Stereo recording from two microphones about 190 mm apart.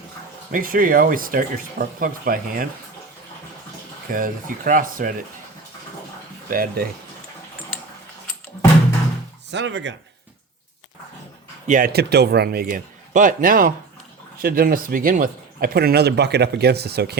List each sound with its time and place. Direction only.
0.5 s speech: 45° right (ahead or behind)
4.1 s speech: 45° right (ahead or behind)
6.5 s speech: 50° right (ahead or behind)
9.5 s speech: 70° right (ahead or behind)
11.7 s speech: 50° right (ahead or behind)